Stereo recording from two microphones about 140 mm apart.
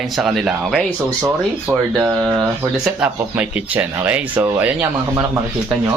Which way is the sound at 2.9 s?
10° right (ahead or behind).